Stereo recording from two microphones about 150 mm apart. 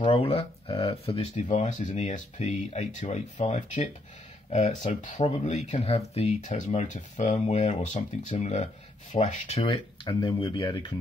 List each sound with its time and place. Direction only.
0.0 s speech: 40° left (ahead or behind)
10.0 s speech: 30° left (ahead or behind)